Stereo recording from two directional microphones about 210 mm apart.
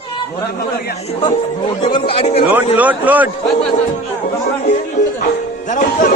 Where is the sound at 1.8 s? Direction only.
25° left (ahead or behind).